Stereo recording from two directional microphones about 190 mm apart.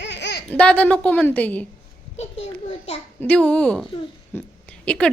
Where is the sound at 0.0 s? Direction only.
65° left (ahead or behind).